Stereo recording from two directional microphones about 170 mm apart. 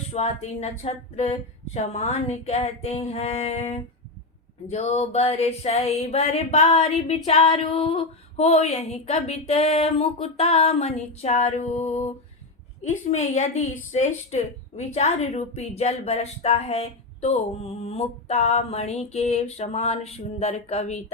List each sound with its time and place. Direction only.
0.1 s speech: 35° left (ahead or behind)